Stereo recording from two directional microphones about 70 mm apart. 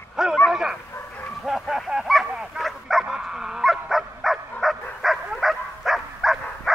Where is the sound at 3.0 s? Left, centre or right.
Centre.